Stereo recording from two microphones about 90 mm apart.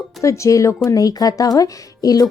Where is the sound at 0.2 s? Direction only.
35° left (ahead or behind).